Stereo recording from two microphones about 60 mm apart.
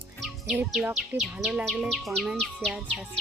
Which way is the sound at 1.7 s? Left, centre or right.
Centre.